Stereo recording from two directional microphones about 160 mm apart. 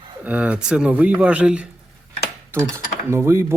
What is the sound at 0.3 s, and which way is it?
Speech, 10° right (ahead or behind).